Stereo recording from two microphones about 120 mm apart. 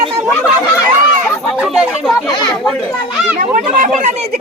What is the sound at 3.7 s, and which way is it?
Speech, 75° right (ahead or behind).